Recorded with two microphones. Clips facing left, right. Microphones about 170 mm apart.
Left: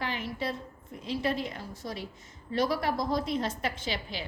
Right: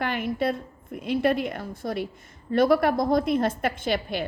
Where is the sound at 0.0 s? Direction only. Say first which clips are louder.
Right 8 dB; 55° right (ahead or behind).